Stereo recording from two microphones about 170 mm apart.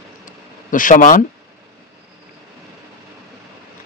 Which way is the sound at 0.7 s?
50° left (ahead or behind).